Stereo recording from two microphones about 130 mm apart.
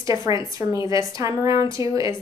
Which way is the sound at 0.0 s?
25° right (ahead or behind).